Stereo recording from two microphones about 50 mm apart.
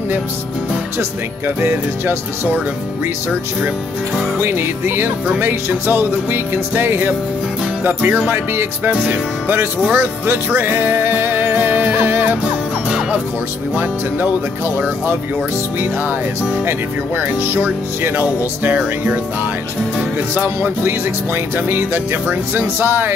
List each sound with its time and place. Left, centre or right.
1.6 s speech: right
4.4 s speech: right
6.7 s music: right
8.3 s speech: right
9.8 s music: right
17.2 s speech: right
18.4 s music: right
20.3 s music: right
22.8 s speech: right